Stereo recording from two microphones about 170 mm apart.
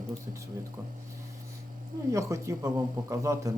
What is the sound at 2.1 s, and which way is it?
Speech, 20° right (ahead or behind).